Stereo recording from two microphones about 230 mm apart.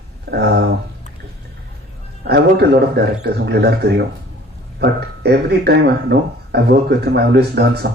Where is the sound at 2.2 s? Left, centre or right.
Right.